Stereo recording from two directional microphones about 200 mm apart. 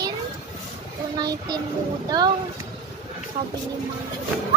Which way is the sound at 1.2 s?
20° right (ahead or behind).